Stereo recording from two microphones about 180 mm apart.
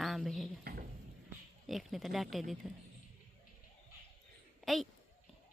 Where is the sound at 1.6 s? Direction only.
Centre (ahead or behind).